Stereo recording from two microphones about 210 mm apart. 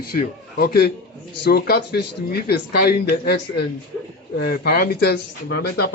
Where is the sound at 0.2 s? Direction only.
45° left (ahead or behind).